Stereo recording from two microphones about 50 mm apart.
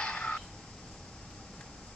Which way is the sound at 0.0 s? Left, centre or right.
Centre.